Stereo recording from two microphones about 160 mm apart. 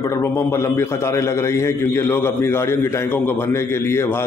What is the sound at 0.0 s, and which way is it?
A man's voice, 20° left (ahead or behind).